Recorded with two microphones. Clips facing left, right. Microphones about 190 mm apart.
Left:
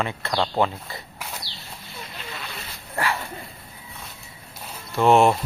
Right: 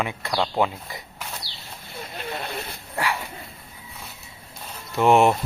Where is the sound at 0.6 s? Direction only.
15° right (ahead or behind).